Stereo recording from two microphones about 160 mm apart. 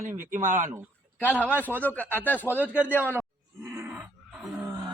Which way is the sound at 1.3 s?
10° right (ahead or behind).